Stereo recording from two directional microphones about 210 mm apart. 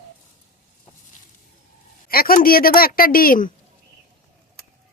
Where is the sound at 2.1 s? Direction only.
45° left (ahead or behind).